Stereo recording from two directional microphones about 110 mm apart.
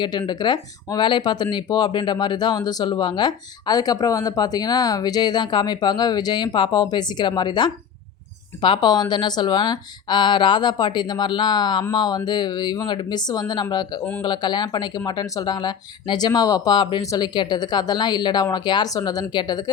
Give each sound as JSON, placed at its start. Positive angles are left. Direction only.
{"t": 0.0, "sound": "speech", "side_deg": 45}